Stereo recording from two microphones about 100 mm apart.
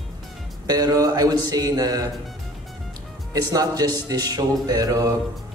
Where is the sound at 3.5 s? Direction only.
40° right (ahead or behind).